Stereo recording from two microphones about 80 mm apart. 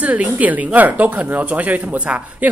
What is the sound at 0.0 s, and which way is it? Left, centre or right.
A woman's voice, centre.